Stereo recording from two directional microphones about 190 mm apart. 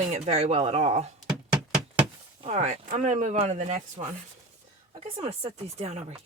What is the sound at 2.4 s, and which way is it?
Speech, 35° right (ahead or behind).